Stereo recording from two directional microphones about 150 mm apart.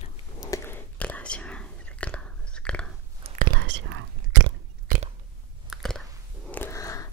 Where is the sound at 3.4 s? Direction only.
80° right.